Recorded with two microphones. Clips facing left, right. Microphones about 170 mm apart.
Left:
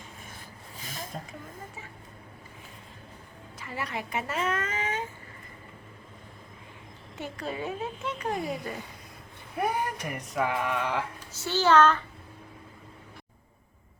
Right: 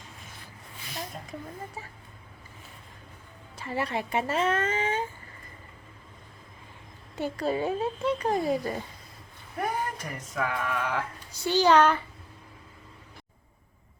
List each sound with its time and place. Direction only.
1.3 s speech: 35° right (ahead or behind)
3.6 s speech: 30° right (ahead or behind)
7.2 s speech: 35° right (ahead or behind)
9.6 s speech: 15° left (ahead or behind)
10.3 s a sound: 20° left (ahead or behind)
11.3 s a child's voice: 15° right (ahead or behind)